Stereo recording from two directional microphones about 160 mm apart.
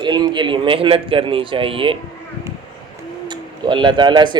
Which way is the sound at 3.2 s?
30° right (ahead or behind).